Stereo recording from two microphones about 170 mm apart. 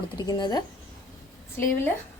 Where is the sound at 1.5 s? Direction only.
10° left (ahead or behind).